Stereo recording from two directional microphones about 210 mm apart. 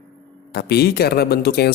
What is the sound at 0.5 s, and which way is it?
Speech, 50° left (ahead or behind).